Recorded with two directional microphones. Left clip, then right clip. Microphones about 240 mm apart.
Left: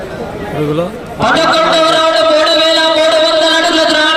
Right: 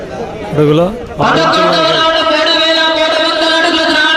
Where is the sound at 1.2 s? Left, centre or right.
Left.